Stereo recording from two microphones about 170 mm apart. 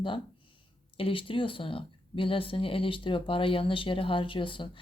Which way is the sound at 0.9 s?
30° left (ahead or behind).